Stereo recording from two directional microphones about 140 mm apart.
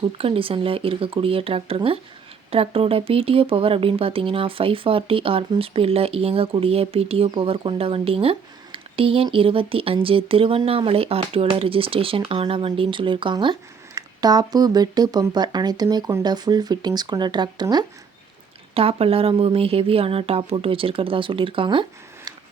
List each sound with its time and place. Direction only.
0.0 s speech: 40° right (ahead or behind)
18.7 s speech: 40° right (ahead or behind)